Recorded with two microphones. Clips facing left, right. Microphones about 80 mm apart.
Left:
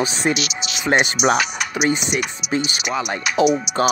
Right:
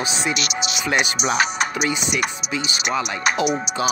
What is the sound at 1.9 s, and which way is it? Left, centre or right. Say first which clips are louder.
Speech: left 4 dB; left.